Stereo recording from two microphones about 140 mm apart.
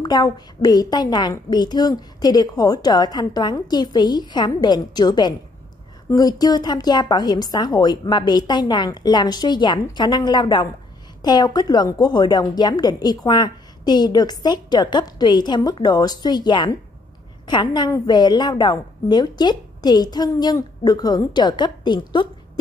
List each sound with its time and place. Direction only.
0.0 s a woman's voice: 30° left (ahead or behind)